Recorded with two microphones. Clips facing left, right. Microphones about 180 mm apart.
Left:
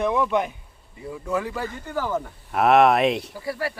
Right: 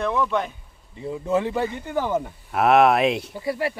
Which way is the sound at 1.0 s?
25° right (ahead or behind).